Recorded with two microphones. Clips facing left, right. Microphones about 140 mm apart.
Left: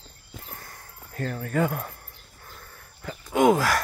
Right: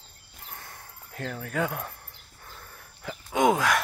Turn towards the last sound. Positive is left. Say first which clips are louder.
# left 3 dB
turn(degrees=0)  # may be behind; listen again after turning